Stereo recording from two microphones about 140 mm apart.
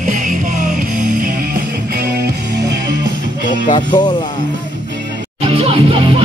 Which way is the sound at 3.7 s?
30° left (ahead or behind).